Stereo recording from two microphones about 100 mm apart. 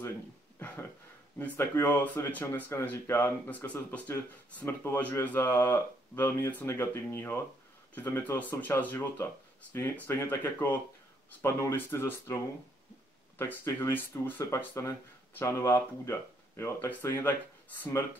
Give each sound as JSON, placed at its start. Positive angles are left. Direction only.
{"t": 1.6, "sound": "speech", "side_deg": 25}
{"t": 13.4, "sound": "speech", "side_deg": 25}